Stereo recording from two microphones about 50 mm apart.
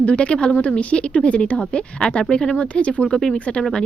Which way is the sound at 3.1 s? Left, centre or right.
Centre.